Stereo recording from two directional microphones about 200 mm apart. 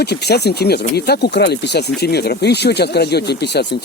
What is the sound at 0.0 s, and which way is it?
Speech, 55° left (ahead or behind).